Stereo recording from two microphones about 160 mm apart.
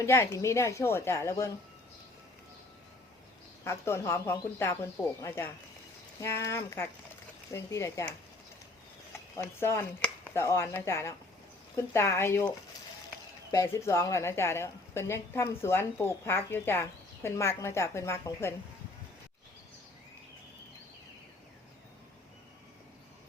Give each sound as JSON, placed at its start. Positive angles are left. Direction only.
{"t": 0.0, "sound": "a woman's voice", "side_deg": 20}
{"t": 3.6, "sound": "a woman's voice", "side_deg": 15}
{"t": 9.3, "sound": "a woman's voice", "side_deg": 15}